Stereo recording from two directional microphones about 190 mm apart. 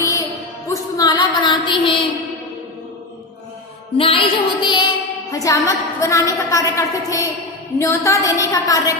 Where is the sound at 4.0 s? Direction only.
30° left (ahead or behind).